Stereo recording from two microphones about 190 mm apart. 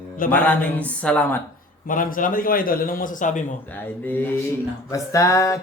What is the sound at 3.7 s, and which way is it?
Speech, 10° left (ahead or behind).